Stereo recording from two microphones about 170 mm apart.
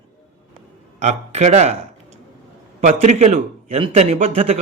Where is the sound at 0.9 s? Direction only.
45° right (ahead or behind).